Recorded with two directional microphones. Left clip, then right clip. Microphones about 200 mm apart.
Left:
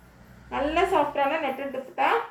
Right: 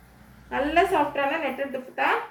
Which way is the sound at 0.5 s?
20° right (ahead or behind).